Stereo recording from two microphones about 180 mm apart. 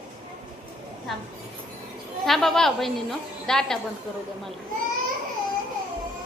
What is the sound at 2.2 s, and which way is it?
A woman's voice, centre (ahead or behind).